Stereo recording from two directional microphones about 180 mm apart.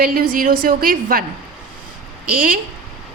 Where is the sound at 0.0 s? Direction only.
50° right (ahead or behind).